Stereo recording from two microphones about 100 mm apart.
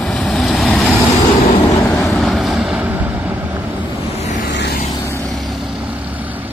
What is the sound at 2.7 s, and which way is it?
Vehicle, 15° right (ahead or behind).